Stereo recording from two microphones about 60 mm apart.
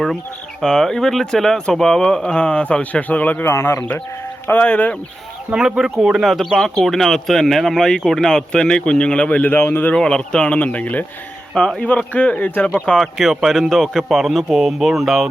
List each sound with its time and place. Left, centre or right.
0.6 s speech: centre; by 3.4 s left
3.4 s speech: left
4.4 s speech: left
5.5 s speech: centre
6.2 s speech: centre; by 9.6 s left
9.6 s speech: left
9.9 s speech: centre
11.6 s speech: centre
12.1 s speech: left
13.0 s speech: centre